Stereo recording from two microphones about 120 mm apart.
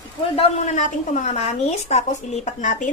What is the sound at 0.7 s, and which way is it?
Speech, 90° left.